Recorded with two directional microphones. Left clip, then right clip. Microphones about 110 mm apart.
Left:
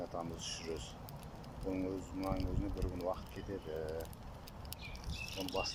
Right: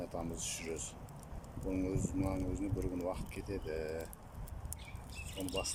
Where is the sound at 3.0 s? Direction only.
25° right (ahead or behind).